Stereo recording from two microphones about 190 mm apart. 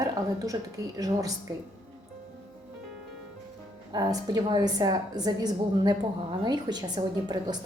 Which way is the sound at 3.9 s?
20° right (ahead or behind).